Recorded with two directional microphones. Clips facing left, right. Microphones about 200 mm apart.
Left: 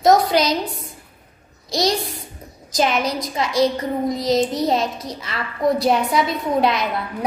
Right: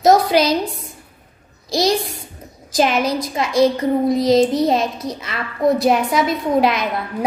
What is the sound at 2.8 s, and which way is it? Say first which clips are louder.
A woman's voice: right 3 dB; 25° right (ahead or behind).